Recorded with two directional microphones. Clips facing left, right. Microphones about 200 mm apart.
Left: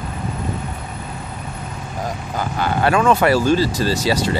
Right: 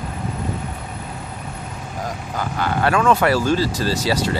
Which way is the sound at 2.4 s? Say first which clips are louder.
Left 1 dB; 25° left (ahead or behind).